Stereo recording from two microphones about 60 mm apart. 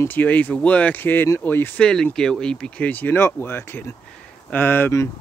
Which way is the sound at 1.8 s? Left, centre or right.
Centre.